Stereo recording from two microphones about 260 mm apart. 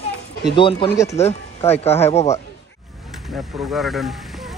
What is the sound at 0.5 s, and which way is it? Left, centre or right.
Speech, centre.